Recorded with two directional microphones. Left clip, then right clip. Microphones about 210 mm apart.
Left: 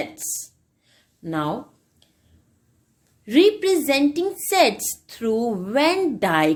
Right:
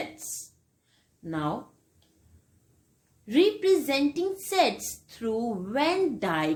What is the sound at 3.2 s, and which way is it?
A woman's voice, 45° left (ahead or behind).